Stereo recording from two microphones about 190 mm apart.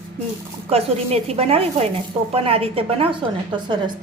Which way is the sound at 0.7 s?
30° right (ahead or behind).